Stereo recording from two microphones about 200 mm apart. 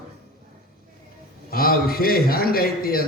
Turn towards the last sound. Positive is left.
turn(degrees=50)  # may be behind; listen again after turning